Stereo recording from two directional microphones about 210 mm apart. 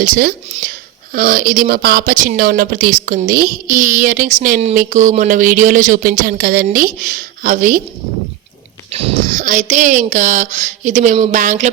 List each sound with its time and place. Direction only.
0.2 s speech: 40° right (ahead or behind)
8.9 s speech: 30° right (ahead or behind)